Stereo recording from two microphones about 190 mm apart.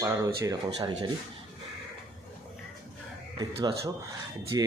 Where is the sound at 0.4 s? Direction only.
20° right (ahead or behind).